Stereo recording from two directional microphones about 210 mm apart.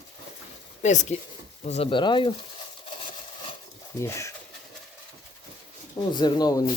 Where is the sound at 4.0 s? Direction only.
15° left (ahead or behind).